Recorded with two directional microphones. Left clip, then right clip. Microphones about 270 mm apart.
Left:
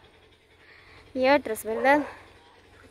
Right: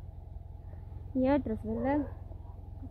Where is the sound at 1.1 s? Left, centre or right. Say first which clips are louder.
Left 8 dB; centre.